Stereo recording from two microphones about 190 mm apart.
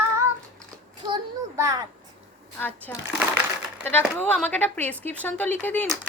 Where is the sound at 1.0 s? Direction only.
20° right (ahead or behind).